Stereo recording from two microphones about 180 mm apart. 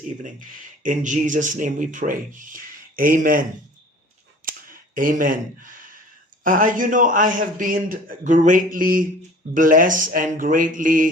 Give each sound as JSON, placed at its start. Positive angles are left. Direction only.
{"t": 0.2, "sound": "speech", "side_deg": -50}
{"t": 4.4, "sound": "a sound", "side_deg": -50}
{"t": 6.4, "sound": "speech", "side_deg": -50}